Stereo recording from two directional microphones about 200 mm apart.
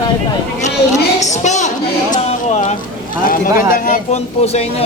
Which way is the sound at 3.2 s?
45° left (ahead or behind).